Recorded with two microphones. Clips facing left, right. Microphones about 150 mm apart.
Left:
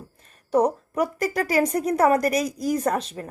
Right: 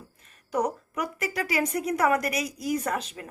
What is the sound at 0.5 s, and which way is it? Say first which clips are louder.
Speech: left 7 dB; 30° left (ahead or behind).